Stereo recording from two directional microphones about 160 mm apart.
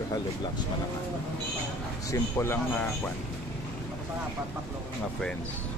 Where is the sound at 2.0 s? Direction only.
15° left (ahead or behind).